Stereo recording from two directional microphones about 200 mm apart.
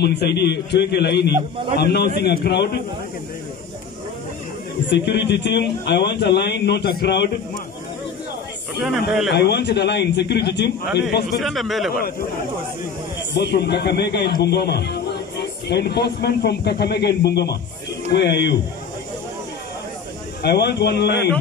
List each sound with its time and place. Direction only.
0.0 s a man's voice: 55° left (ahead or behind)
4.8 s a man's voice: 60° left (ahead or behind)
9.3 s a man's voice: 55° left (ahead or behind)
11.3 s speech: centre (ahead or behind)
13.3 s a man's voice: 55° left (ahead or behind)
20.4 s a man's voice: 55° left (ahead or behind)